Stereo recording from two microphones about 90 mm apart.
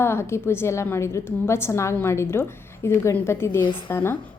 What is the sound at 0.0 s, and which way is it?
A woman's voice, 30° left (ahead or behind).